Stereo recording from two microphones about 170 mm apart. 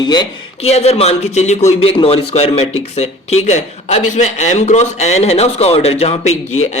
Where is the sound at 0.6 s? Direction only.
40° left (ahead or behind).